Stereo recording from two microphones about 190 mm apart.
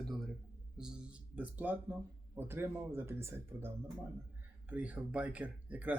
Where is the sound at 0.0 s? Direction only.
Centre (ahead or behind).